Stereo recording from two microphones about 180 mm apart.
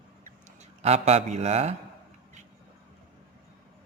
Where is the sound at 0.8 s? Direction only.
35° right (ahead or behind).